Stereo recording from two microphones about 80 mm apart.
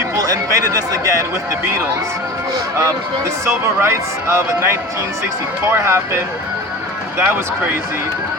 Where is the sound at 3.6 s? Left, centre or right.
Right.